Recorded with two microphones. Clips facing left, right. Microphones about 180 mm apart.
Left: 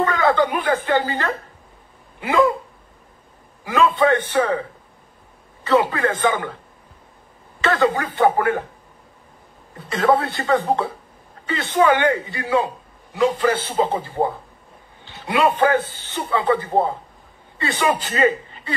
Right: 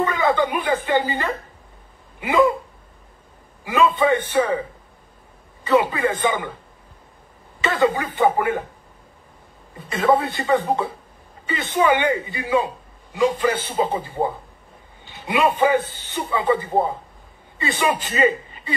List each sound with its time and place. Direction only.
0.0 s a sound: 15° right (ahead or behind)
3.6 s a man's voice: 15° right (ahead or behind)
5.7 s a man's voice: 15° right (ahead or behind)
7.6 s a man's voice: 15° right (ahead or behind)
9.8 s a man's voice: 15° right (ahead or behind)
15.2 s a man's voice: 15° right (ahead or behind)